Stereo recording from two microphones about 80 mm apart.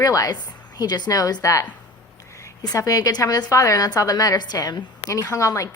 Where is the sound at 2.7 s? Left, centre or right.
Left.